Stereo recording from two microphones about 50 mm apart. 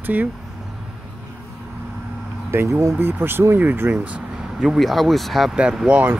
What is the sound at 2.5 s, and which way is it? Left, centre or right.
Speech, right.